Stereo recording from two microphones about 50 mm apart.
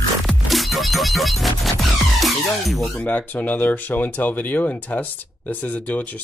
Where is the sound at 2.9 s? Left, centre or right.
Left.